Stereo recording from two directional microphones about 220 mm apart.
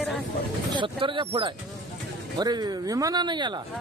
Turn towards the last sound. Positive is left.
turn(degrees=-20)  # may be behind; listen again after turning